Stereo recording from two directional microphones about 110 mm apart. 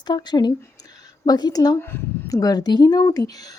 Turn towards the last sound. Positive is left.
turn(degrees=35)  # may be behind; listen again after turning